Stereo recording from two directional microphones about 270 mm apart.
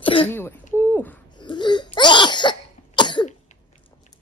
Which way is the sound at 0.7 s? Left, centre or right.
Centre.